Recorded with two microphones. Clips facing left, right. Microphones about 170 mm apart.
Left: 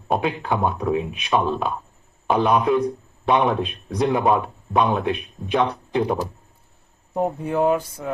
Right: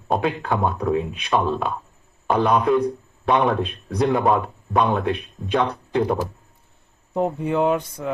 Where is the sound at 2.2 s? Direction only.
5° left (ahead or behind).